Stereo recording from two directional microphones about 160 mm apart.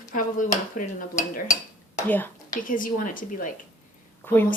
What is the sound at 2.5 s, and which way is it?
Speech, 55° left (ahead or behind).